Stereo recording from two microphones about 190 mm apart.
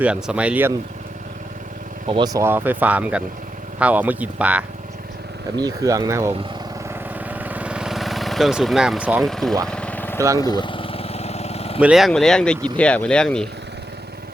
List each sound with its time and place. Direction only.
0.0 s speech: 5° right (ahead or behind)
2.0 s speech: 25° right (ahead or behind); by 4.6 s 5° right (ahead or behind)
5.5 s speech: 20° right (ahead or behind)
7.3 s vehicle: 10° right (ahead or behind); by 10.2 s 10° left (ahead or behind)
10.2 s speech: 15° right (ahead or behind)
10.4 s vehicle: 25° left (ahead or behind)
11.8 s speech: 5° right (ahead or behind)